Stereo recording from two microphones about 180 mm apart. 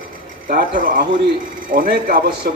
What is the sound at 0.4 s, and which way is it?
A man's voice, 50° right (ahead or behind).